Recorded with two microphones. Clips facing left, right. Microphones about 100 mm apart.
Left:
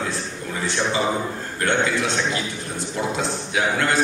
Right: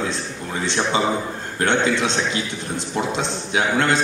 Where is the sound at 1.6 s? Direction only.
20° right (ahead or behind).